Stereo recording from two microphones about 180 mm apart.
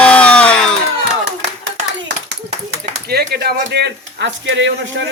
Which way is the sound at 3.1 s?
60° right (ahead or behind).